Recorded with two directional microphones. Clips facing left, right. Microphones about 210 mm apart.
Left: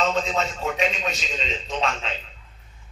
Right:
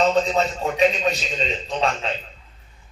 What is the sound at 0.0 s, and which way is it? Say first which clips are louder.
A man's voice: right 5 dB; 35° right (ahead or behind).